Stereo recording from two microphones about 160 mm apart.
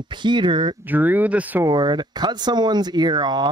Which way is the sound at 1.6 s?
25° right (ahead or behind).